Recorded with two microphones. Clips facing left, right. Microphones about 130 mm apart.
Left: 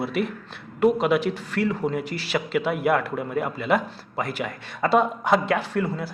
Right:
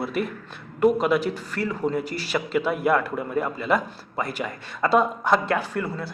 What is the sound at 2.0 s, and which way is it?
Speech, 40° right (ahead or behind).